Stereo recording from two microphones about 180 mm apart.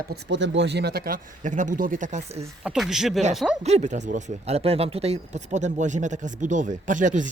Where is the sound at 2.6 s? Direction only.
5° right (ahead or behind).